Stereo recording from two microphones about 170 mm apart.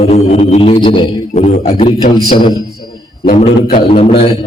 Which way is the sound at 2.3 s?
25° left (ahead or behind).